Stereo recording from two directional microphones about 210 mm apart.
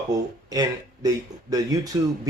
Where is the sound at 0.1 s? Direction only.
20° right (ahead or behind).